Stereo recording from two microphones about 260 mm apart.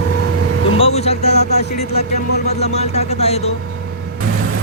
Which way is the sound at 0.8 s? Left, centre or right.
Left.